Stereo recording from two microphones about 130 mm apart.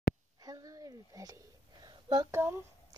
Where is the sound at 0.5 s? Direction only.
30° right (ahead or behind).